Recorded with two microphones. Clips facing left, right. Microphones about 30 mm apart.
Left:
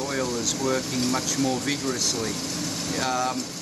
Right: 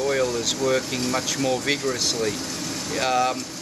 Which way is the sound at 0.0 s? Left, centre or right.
Right.